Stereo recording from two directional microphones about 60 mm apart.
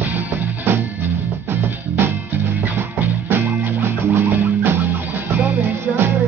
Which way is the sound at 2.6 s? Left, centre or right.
Right.